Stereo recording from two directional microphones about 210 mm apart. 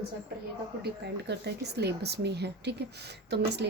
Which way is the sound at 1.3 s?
50° right (ahead or behind).